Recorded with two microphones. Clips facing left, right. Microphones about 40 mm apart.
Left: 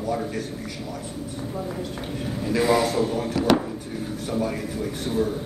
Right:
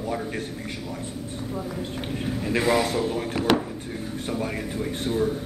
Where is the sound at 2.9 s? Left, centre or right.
Right.